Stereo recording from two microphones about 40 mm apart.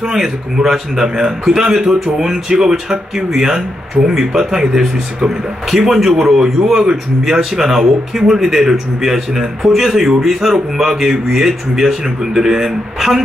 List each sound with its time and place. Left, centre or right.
0.0 s a man's voice: centre